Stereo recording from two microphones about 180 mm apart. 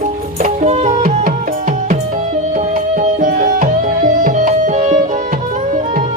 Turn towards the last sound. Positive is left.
turn(degrees=-45)  # may be behind; listen again after turning